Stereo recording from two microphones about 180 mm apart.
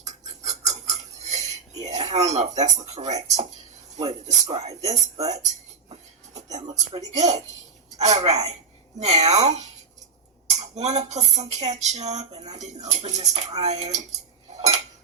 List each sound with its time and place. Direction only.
0.0 s cutlery: 40° right (ahead or behind)
2.6 s speech: 40° right (ahead or behind)
5.3 s a sound: 40° right (ahead or behind)
6.7 s a woman's voice: 40° right (ahead or behind)
14.5 s dishes: 35° right (ahead or behind)